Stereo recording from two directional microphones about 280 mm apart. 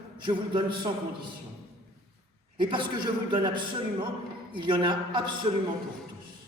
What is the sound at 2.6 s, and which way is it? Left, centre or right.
Speech, centre.